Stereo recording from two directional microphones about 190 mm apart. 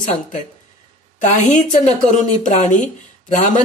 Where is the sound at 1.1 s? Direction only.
40° left (ahead or behind).